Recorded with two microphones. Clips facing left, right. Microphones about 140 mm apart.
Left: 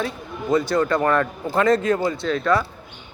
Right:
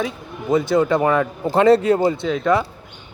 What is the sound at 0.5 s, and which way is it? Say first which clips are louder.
Speech: right 3 dB; 20° right (ahead or behind).